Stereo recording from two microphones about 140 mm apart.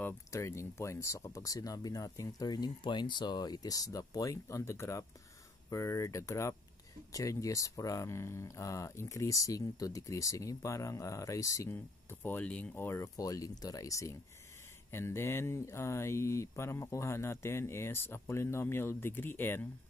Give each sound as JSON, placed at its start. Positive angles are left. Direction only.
{"t": 0.0, "sound": "speech", "side_deg": 20}